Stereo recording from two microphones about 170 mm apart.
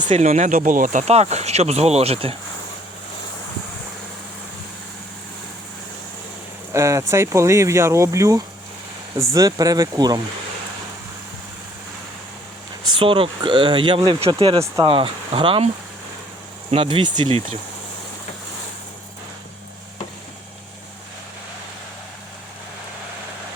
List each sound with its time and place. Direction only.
0.0 s speech: 45° right (ahead or behind)
6.7 s speech: 15° right (ahead or behind)
13.0 s speech: 30° right (ahead or behind)
16.7 s speech: 30° right (ahead or behind)